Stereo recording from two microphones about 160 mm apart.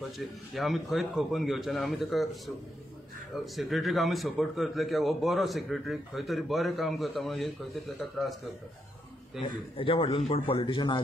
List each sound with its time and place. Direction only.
0.6 s a man's voice: centre (ahead or behind)
3.5 s a man's voice: centre (ahead or behind)
9.4 s a man's voice: 30° left (ahead or behind)